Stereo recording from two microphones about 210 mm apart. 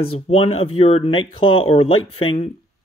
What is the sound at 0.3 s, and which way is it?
Speech, 25° left (ahead or behind).